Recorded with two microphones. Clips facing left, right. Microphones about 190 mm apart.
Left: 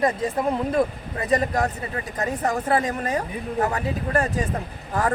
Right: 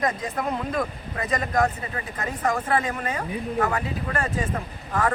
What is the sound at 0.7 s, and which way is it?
A man's voice, 30° left (ahead or behind).